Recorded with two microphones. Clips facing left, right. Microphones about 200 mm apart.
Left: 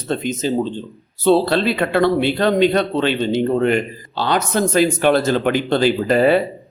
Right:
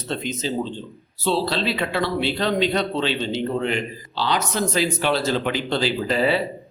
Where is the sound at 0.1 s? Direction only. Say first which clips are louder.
Left 6 dB; 50° left (ahead or behind).